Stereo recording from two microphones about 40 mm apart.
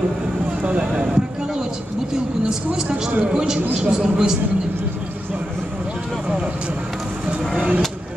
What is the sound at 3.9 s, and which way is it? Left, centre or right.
Speech, centre.